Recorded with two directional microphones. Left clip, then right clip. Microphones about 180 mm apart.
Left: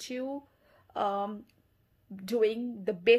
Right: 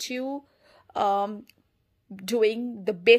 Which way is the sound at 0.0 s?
35° right (ahead or behind).